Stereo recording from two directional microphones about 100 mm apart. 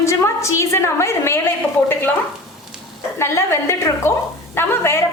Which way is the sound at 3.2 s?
25° left (ahead or behind).